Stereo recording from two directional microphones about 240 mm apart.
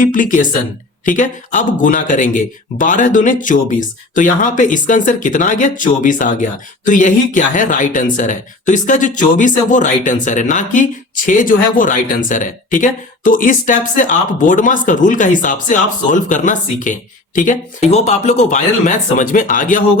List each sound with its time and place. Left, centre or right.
0.0 s speech: left